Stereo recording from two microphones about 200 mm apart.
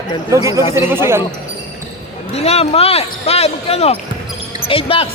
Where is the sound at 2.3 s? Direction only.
30° left (ahead or behind).